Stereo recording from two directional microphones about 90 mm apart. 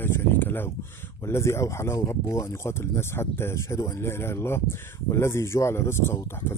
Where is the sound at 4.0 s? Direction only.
30° left (ahead or behind).